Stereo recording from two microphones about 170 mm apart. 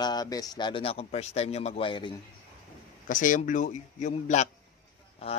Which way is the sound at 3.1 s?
50° left (ahead or behind).